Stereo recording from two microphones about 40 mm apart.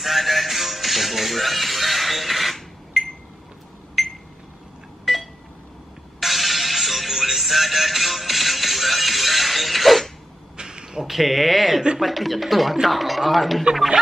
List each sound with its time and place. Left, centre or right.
0.0 s music: centre
5.0 s telephone dialing: centre
6.1 s music: centre
10.6 s a sound: centre
11.0 s speech: centre